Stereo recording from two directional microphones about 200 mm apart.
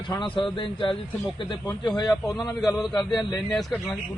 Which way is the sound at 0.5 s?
25° left (ahead or behind).